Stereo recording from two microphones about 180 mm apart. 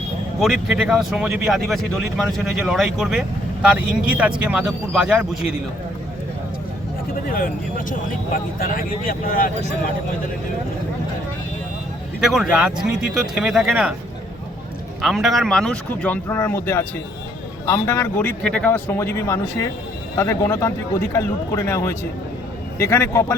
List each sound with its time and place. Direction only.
0.3 s speech: centre (ahead or behind)
7.3 s speech: 50° left (ahead or behind)
12.2 s speech: 5° right (ahead or behind)
15.0 s speech: centre (ahead or behind); by 23.2 s 15° left (ahead or behind)